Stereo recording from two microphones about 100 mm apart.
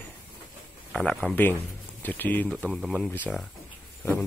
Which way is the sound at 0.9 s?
5° left (ahead or behind).